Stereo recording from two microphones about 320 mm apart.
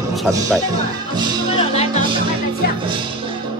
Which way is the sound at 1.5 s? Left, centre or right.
Centre.